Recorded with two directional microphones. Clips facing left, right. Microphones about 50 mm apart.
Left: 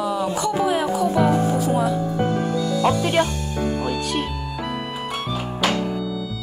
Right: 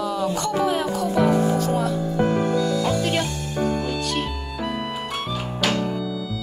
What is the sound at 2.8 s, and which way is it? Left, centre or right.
Speech, left.